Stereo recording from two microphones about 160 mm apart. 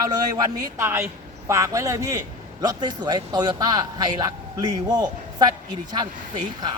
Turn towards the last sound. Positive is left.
turn(degrees=-25)  # may be behind; listen again after turning